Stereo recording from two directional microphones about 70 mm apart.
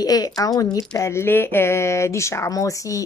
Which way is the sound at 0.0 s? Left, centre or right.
Left.